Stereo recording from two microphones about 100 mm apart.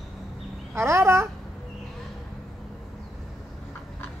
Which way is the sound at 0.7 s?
25° right (ahead or behind).